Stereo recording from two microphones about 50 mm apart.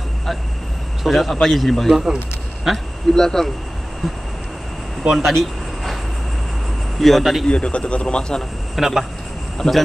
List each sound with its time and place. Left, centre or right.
1.0 s a man's voice: centre
3.2 s speech: centre
5.2 s a sound: centre
7.0 s a man's voice: centre
7.4 s speech: left
8.7 s speech: centre
9.6 s speech: centre